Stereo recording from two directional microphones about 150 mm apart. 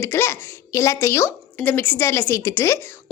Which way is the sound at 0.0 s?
15° left (ahead or behind).